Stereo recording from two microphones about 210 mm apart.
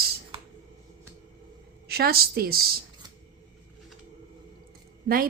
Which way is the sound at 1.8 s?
45° right (ahead or behind).